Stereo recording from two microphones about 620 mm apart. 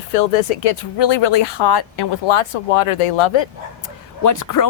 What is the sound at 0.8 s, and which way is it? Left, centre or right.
Speech, left.